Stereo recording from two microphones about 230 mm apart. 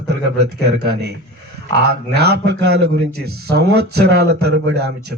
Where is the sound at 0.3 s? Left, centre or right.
Right.